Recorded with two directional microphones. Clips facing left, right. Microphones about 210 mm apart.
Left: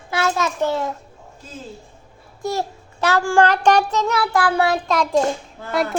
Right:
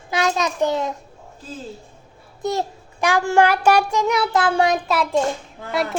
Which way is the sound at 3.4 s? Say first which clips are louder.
Even; 10° right (ahead or behind).